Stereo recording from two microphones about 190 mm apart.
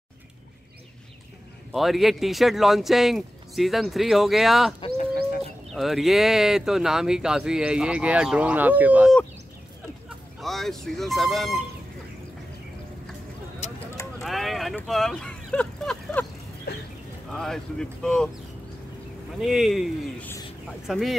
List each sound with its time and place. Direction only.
1.7 s speech: centre (ahead or behind)
4.7 s speech: 30° left (ahead or behind)
5.7 s speech: centre (ahead or behind)
13.6 s a sound: 35° left (ahead or behind)
14.2 s a sound: centre (ahead or behind)
14.8 s vehicle: centre (ahead or behind)
16.7 s a sound: 55° left (ahead or behind)
17.3 s speech: centre (ahead or behind)
19.4 s speech: centre (ahead or behind)